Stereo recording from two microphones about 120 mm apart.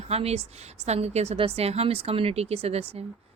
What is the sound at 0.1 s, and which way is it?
Speech, 60° right (ahead or behind).